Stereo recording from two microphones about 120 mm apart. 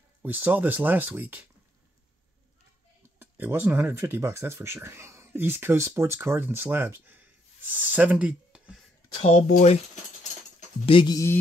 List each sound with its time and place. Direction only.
0.2 s speech: 15° right (ahead or behind)
3.2 s speech: 15° right (ahead or behind)
9.1 s speech: 55° left (ahead or behind)
9.5 s speech: 70° left (ahead or behind)
10.9 s speech: 45° left (ahead or behind)